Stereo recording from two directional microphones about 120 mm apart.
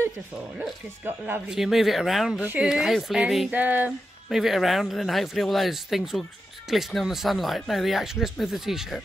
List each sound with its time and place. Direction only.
1.0 s speech: 15° right (ahead or behind)
1.5 s speech: 5° right (ahead or behind)
3.5 s speech: 15° right (ahead or behind)
4.3 s speech: centre (ahead or behind)